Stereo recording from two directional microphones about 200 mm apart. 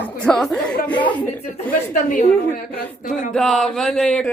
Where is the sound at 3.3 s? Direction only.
Centre (ahead or behind).